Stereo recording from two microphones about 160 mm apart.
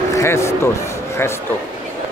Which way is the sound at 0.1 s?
15° left (ahead or behind).